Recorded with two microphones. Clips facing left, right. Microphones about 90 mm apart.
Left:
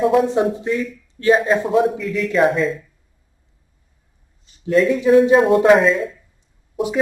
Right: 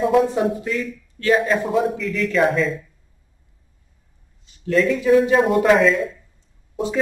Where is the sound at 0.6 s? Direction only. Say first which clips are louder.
Left 3 dB; 25° left (ahead or behind).